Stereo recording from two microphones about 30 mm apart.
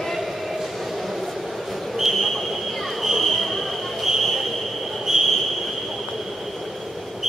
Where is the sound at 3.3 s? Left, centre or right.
Centre.